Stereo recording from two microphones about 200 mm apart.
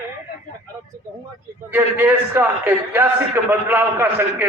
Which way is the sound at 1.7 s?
10° right (ahead or behind).